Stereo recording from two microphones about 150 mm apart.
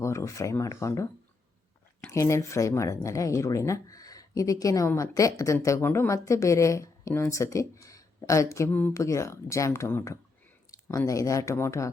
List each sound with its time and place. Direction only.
0.0 s speech: 20° left (ahead or behind)
2.0 s speech: 20° left (ahead or behind)